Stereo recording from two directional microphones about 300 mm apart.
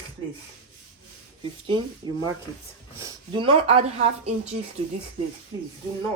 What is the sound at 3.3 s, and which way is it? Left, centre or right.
Speech, centre.